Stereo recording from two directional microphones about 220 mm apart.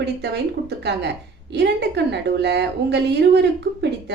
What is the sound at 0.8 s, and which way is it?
A woman's voice, 50° right (ahead or behind).